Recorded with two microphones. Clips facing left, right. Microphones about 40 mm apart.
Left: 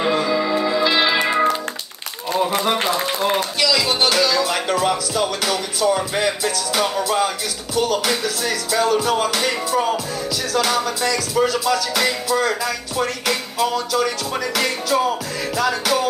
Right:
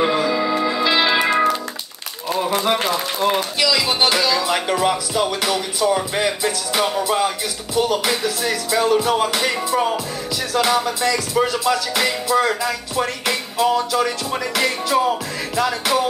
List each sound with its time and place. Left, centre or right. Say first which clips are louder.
0.0 s music: right 1 dB; centre
2.6 s speech: even; centre